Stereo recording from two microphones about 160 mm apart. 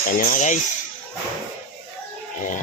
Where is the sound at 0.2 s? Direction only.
55° left (ahead or behind).